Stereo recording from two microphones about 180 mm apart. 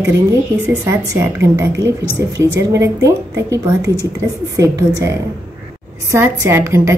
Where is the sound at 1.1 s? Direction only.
15° right (ahead or behind).